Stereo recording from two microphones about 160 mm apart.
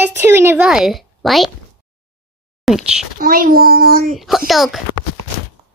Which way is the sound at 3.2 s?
65° right (ahead or behind).